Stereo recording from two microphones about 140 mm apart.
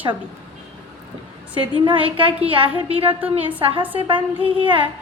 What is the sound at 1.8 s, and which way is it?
Music, 35° right (ahead or behind).